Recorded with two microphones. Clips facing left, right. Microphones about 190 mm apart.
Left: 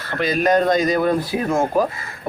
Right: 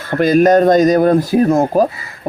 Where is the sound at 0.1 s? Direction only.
45° right (ahead or behind).